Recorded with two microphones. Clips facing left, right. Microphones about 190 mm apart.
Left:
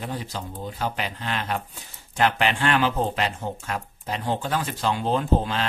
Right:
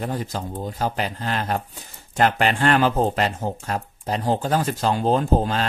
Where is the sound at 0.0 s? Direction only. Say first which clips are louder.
Right 5 dB; 45° right (ahead or behind).